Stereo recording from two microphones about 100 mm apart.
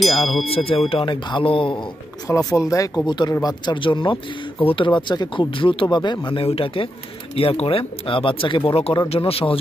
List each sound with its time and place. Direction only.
0.0 s speech: centre (ahead or behind)
0.5 s speech: 75° left (ahead or behind); by 1.9 s 60° left (ahead or behind)
2.2 s speech: 35° left (ahead or behind)
3.1 s speech: 45° left (ahead or behind); by 9.6 s 70° left (ahead or behind)